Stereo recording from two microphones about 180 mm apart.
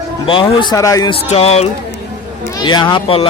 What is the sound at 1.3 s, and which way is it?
Speech, 35° left (ahead or behind).